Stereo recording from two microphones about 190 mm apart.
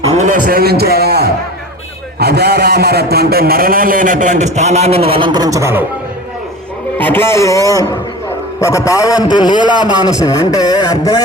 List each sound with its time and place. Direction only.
0.2 s a man's voice: 45° right (ahead or behind); by 5.8 s 15° right (ahead or behind)
7.0 s a sound: 10° left (ahead or behind)
9.3 s a man's voice: 20° left (ahead or behind)